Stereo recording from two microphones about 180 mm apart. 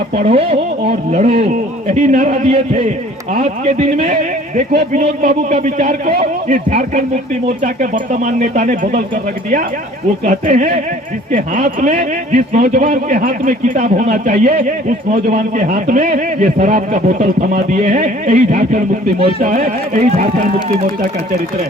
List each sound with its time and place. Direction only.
0.2 s a man's voice: 35° right (ahead or behind); by 6.6 s 55° right (ahead or behind)
7.6 s speech: 45° right (ahead or behind)
10.2 s speech: 45° right (ahead or behind)